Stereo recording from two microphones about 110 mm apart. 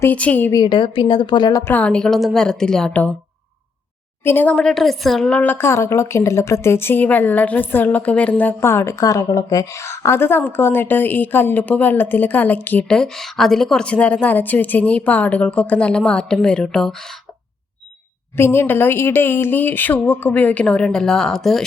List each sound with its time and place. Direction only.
0.0 s a woman's voice: 15° left (ahead or behind)
0.5 s speech: 45° left (ahead or behind)
1.6 s a woman's voice: 15° left (ahead or behind)
4.2 s a woman's voice: 20° left (ahead or behind); by 5.4 s 5° left (ahead or behind)
5.4 s speech: 20° left (ahead or behind)
12.9 s a woman's voice: 5° left (ahead or behind)
18.3 s a woman's voice: 20° left (ahead or behind); by 21.6 s 5° left (ahead or behind)